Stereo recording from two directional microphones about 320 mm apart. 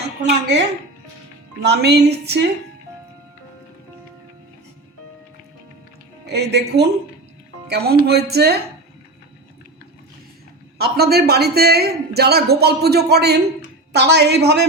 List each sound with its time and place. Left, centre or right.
0.3 s a woman's voice: right
1.6 s a woman's voice: right
6.2 s a woman's voice: right
10.8 s a woman's voice: right